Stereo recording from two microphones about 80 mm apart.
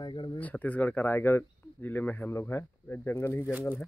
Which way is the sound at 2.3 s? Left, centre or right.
Left.